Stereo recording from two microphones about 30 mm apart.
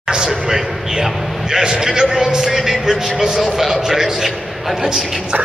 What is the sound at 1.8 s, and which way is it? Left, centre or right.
A man's voice, centre.